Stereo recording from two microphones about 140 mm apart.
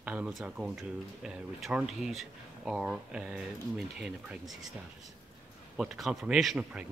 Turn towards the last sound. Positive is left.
turn(degrees=-5)  # may be behind; listen again after turning